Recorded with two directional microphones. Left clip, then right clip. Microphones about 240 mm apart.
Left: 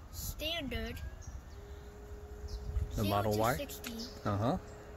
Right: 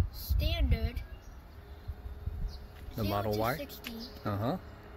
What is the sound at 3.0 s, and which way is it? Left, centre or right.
Speech, centre.